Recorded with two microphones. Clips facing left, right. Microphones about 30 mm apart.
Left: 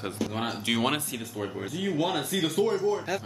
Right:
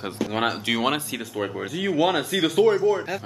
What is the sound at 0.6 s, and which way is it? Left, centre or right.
Speech, right.